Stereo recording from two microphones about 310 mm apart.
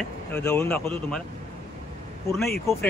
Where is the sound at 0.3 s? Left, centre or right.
Centre.